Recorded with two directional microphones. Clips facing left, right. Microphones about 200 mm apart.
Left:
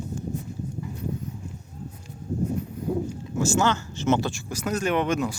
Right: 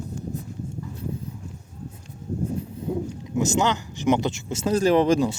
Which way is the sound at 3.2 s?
20° right (ahead or behind).